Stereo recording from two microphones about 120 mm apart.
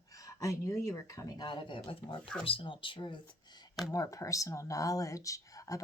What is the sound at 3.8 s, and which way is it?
Speech, 30° left (ahead or behind).